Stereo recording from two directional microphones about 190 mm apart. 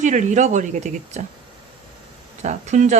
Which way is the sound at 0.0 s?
40° right (ahead or behind).